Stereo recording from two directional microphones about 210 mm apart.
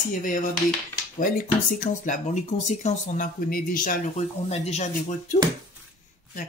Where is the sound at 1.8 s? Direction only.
35° left (ahead or behind).